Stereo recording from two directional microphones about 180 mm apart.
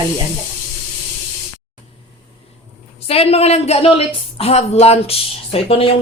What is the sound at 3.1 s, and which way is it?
Speech, 35° left (ahead or behind).